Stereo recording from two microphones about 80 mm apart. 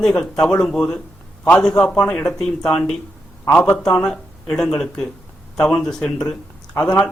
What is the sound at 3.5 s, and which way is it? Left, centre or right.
Speech, left.